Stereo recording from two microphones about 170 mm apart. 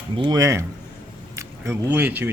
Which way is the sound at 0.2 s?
20° right (ahead or behind).